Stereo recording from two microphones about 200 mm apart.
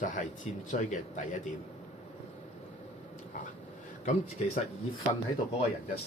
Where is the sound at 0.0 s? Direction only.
40° left (ahead or behind).